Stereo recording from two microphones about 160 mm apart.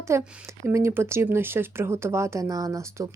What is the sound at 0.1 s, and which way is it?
Speech, 15° right (ahead or behind).